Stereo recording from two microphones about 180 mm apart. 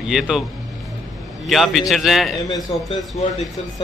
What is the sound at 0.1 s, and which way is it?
Speech, centre (ahead or behind).